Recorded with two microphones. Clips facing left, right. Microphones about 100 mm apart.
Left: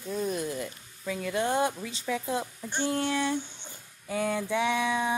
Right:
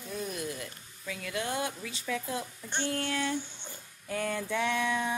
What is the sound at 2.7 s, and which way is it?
Speech, 15° left (ahead or behind).